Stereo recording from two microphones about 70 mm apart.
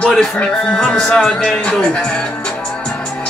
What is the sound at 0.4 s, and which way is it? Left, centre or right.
Speech, centre.